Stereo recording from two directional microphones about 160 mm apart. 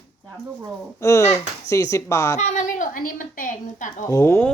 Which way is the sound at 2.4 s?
50° left (ahead or behind).